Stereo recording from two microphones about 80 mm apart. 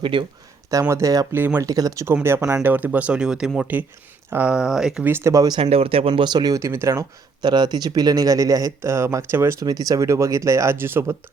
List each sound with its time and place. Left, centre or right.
0.0 s speech: right
0.7 s speech: right
1.3 s speech: right
1.6 s speech: right
2.2 s speech: right
2.6 s speech: right; by 5.0 s centre
5.0 s speech: right
5.3 s speech: right
6.1 s speech: right
6.5 s speech: right
7.4 s speech: right
9.6 s speech: right